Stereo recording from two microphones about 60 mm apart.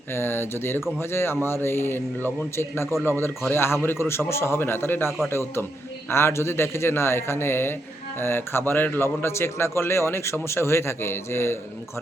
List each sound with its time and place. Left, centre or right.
0.1 s a man's voice: left